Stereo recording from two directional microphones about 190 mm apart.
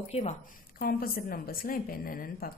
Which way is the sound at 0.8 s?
50° left (ahead or behind).